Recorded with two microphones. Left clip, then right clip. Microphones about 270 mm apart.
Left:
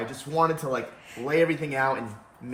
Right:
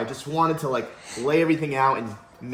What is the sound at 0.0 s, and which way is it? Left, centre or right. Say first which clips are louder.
Speech: right 1 dB; centre.